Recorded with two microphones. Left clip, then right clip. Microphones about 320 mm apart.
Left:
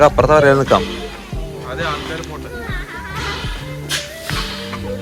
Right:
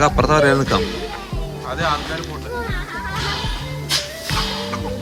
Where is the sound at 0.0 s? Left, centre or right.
Centre.